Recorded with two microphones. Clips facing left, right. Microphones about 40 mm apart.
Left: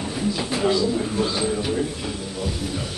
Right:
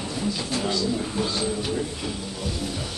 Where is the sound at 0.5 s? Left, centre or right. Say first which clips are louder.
Left 6 dB; centre.